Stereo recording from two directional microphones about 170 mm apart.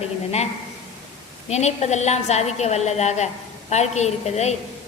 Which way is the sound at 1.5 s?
40° left (ahead or behind).